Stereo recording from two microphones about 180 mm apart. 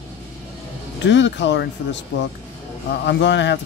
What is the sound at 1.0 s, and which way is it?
Speech, 80° left.